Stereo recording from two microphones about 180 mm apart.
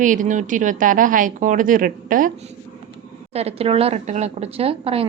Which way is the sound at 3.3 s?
35° right (ahead or behind).